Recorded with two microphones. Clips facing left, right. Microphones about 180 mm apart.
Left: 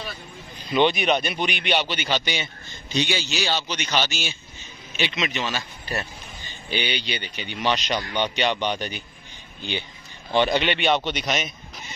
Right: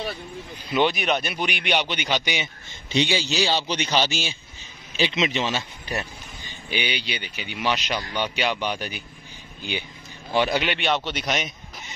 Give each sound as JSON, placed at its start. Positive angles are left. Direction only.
{"t": 0.7, "sound": "a man's voice", "side_deg": -5}
{"t": 6.7, "sound": "a man's voice", "side_deg": -10}